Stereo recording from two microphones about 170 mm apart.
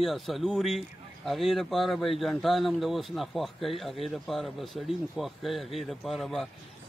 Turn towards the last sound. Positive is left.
turn(degrees=0)  # may be behind; listen again after turning